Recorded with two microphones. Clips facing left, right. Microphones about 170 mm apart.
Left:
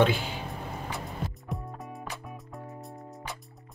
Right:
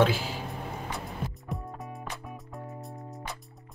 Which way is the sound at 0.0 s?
Centre (ahead or behind).